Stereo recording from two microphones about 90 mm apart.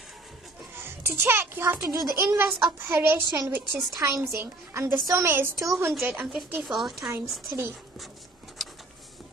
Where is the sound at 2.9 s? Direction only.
25° right (ahead or behind).